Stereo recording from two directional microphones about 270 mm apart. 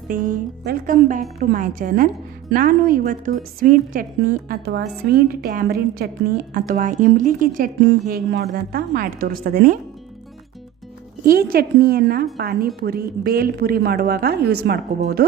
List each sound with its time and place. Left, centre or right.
0.1 s a woman's voice: right
11.3 s a woman's voice: right